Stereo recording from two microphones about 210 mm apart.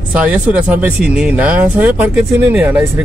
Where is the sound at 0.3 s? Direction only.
5° right (ahead or behind).